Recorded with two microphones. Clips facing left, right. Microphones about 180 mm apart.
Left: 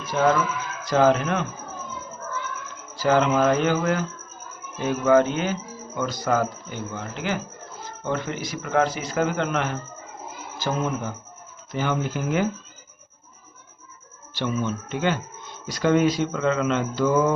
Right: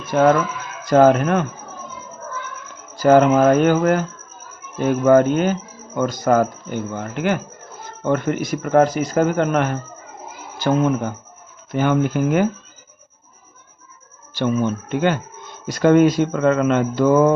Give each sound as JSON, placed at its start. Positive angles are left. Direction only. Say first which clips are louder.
{"t": 0.0, "sound": "speech", "louder": "right 6 dB", "side_deg": -55}
{"t": 2.9, "sound": "speech", "louder": "right 7 dB", "side_deg": -50}
{"t": 11.7, "sound": "speech", "louder": "right 8 dB", "side_deg": -55}
{"t": 14.3, "sound": "speech", "louder": "right 6 dB", "side_deg": -50}